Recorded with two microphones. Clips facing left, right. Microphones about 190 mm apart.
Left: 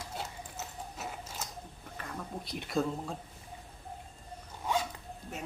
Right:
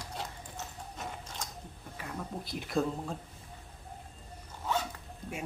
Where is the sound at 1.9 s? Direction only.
5° right (ahead or behind).